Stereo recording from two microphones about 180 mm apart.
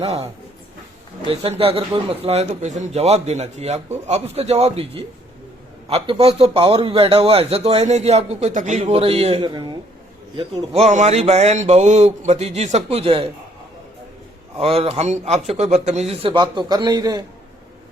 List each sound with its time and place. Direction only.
0.0 s a man's voice: 35° right (ahead or behind)
14.6 s a man's voice: 35° right (ahead or behind)